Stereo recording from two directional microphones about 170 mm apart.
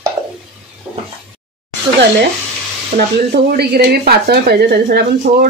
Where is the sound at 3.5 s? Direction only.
70° right (ahead or behind).